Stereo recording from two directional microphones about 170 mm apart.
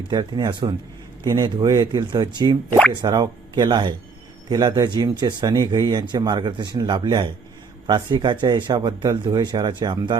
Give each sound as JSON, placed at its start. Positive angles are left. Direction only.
{"t": 0.1, "sound": "speech", "side_deg": -25}
{"t": 2.6, "sound": "speech", "side_deg": 5}
{"t": 2.9, "sound": "speech", "side_deg": -25}